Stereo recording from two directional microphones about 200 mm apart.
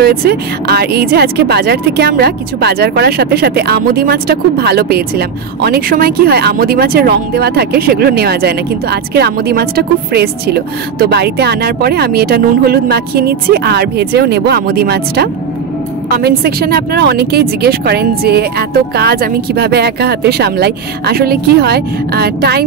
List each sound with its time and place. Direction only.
0.0 s speech: 50° right (ahead or behind)